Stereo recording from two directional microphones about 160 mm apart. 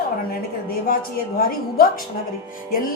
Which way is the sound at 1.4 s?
70° left (ahead or behind).